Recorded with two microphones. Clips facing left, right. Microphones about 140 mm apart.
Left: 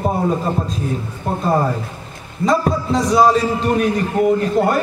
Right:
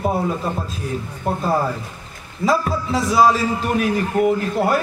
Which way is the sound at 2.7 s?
5° right (ahead or behind).